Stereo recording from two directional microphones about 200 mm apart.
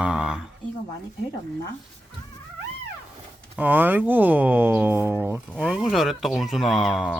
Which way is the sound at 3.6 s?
10° right (ahead or behind).